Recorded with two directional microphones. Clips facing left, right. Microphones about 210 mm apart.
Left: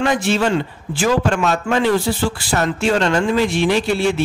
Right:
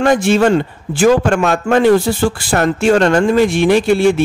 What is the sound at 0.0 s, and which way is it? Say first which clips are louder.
A man's voice: right 6 dB; 50° right (ahead or behind).